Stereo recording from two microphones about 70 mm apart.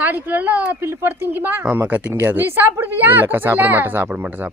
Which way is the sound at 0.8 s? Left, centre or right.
Right.